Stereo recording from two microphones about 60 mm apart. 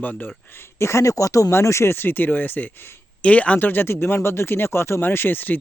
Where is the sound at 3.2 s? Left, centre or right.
Left.